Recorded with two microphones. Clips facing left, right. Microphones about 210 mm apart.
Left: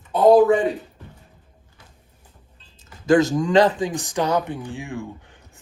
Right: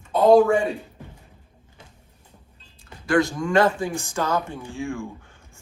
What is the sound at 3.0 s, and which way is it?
Speech, 20° left (ahead or behind).